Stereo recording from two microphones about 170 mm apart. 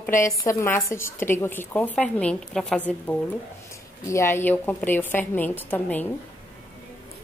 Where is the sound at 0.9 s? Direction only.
15° left (ahead or behind).